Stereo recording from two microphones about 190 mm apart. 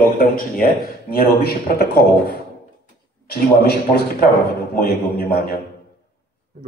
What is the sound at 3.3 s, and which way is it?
A man's voice, 55° left (ahead or behind).